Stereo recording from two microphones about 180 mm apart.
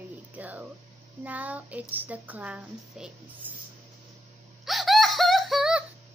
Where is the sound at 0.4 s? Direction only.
10° right (ahead or behind).